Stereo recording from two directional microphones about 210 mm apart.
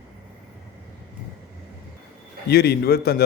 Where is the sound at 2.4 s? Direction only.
50° left (ahead or behind).